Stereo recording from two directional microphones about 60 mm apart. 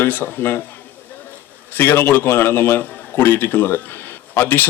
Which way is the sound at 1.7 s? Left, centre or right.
Left.